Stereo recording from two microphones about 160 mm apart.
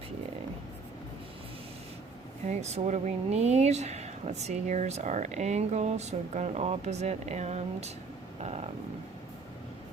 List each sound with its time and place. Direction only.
2.5 s speech: 45° right (ahead or behind)